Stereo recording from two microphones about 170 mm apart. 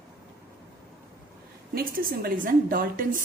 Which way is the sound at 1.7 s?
55° right (ahead or behind).